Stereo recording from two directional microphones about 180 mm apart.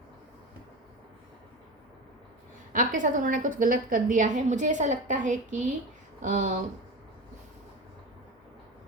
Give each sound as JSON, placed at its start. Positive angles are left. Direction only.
{"t": 2.7, "sound": "a woman's voice", "side_deg": -50}